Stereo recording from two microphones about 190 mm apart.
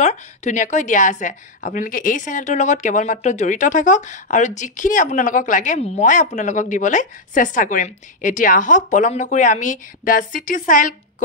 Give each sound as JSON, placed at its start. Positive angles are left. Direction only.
{"t": 0.0, "sound": "a woman's voice", "side_deg": 35}